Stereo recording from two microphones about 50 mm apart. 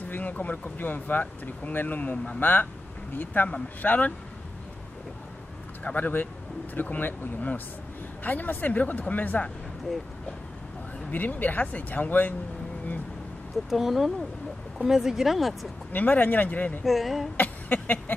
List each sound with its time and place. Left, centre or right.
0.1 s speech: left
5.9 s speech: left
9.9 s speech: centre
11.1 s speech: left
13.7 s speech: centre
15.9 s speech: left
16.8 s speech: centre
17.8 s a sound: left